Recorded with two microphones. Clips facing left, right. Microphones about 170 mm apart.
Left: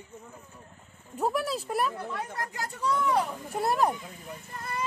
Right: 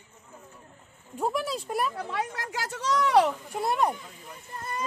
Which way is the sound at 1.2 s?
5° left (ahead or behind).